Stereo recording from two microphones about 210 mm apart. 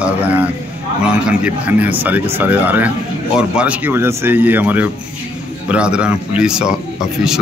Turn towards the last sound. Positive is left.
turn(degrees=-5)  # may be behind; listen again after turning